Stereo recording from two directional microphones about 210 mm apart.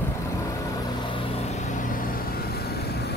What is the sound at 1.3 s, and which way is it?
Vehicle, 30° left (ahead or behind).